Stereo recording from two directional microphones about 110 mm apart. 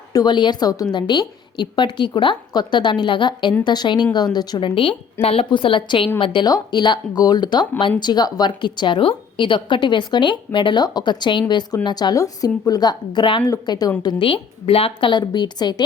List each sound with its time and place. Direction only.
0.1 s a woman's voice: 40° left (ahead or behind); by 5.5 s 60° left (ahead or behind)
5.5 s a woman's voice: 50° left (ahead or behind)
14.0 s a woman's voice: 45° left (ahead or behind)
15.1 s speech: 40° left (ahead or behind)